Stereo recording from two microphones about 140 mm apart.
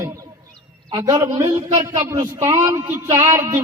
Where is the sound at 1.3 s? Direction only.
25° right (ahead or behind).